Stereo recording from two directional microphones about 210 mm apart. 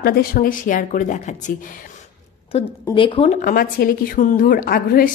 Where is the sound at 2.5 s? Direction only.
25° left (ahead or behind).